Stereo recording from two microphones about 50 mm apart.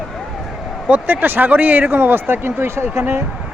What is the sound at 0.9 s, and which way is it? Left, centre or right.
Speech, right.